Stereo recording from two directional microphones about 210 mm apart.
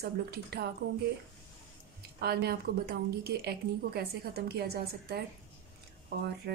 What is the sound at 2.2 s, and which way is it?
A woman's voice, 50° right (ahead or behind).